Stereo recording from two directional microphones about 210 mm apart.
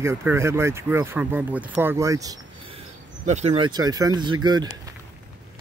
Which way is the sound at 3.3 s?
30° right (ahead or behind).